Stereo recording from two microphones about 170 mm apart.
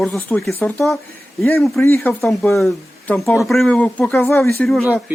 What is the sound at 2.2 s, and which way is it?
Speech, centre (ahead or behind).